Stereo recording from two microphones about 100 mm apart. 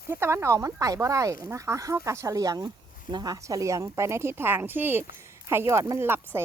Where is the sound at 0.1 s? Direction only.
25° right (ahead or behind).